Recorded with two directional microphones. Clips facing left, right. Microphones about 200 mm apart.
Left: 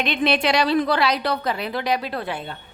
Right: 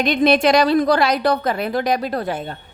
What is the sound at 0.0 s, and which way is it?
A woman's voice, 45° right (ahead or behind).